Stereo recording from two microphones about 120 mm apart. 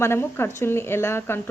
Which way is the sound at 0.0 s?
20° left (ahead or behind).